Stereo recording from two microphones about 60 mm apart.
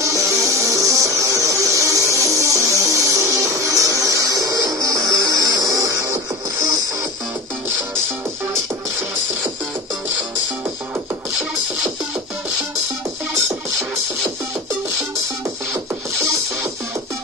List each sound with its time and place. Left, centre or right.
0.0 s music: right